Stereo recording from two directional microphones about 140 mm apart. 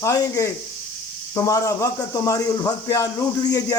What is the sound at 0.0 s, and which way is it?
Speech, 20° left (ahead or behind).